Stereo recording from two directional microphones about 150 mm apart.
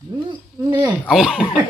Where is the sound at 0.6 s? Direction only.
20° right (ahead or behind).